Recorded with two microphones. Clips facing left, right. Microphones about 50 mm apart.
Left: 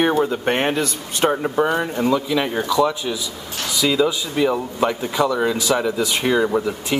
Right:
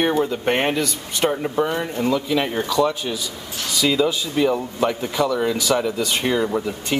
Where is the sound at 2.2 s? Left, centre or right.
Centre.